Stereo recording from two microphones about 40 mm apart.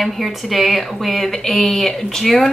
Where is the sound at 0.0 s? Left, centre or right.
Centre.